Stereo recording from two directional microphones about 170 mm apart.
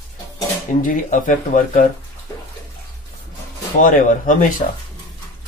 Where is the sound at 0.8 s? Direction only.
50° left (ahead or behind).